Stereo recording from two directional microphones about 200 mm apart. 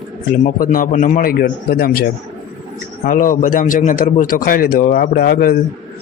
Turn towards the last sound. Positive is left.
turn(degrees=50)  # may be behind; listen again after turning